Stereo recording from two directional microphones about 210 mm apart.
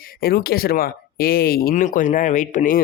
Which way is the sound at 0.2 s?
45° left (ahead or behind).